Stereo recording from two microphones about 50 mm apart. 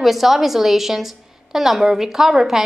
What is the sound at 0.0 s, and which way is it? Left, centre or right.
A woman's voice, centre.